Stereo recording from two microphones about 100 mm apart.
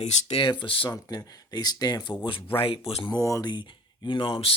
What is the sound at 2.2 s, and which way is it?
Speech, 60° left (ahead or behind).